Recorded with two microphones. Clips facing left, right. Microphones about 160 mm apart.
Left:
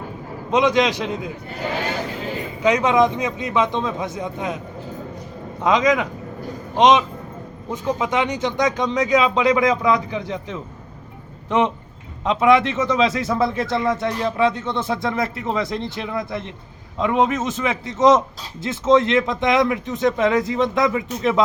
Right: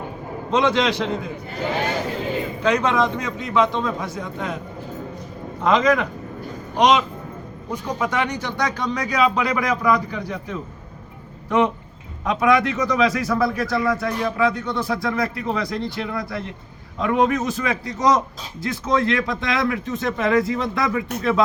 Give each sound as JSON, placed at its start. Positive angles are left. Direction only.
{"t": 0.5, "sound": "a man's voice", "side_deg": 15}
{"t": 2.6, "sound": "a man's voice", "side_deg": 15}
{"t": 5.6, "sound": "a man's voice", "side_deg": 15}